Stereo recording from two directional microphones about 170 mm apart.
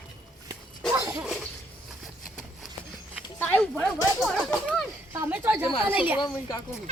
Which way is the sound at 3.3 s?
10° left (ahead or behind).